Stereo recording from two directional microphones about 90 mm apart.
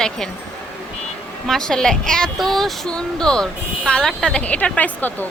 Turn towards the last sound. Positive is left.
turn(degrees=20)  # may be behind; listen again after turning